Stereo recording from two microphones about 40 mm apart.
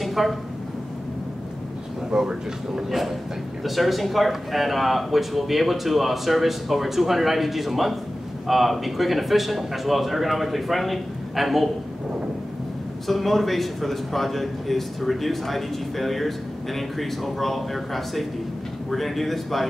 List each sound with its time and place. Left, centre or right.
0.0 s a sound: centre
2.0 s speech: centre
3.6 s a man's voice: centre
13.0 s a man's voice: centre